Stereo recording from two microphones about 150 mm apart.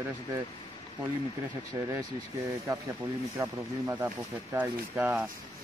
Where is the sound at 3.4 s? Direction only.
20° right (ahead or behind).